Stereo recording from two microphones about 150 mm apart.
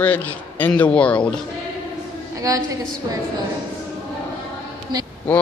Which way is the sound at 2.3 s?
20° right (ahead or behind).